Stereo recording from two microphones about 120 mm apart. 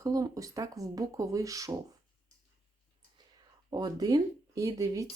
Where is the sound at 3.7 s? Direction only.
35° right (ahead or behind).